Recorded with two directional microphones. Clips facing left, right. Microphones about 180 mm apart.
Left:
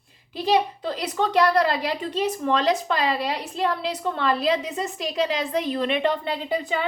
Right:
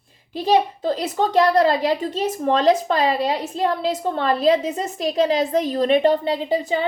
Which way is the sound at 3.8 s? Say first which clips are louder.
Right 4 dB; 35° right (ahead or behind).